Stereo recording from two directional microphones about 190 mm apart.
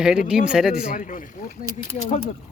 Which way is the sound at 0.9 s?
45° left (ahead or behind).